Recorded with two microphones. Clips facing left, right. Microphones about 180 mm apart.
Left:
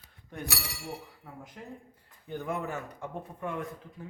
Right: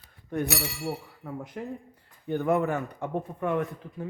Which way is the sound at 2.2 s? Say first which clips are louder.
Right 9 dB; 65° right (ahead or behind).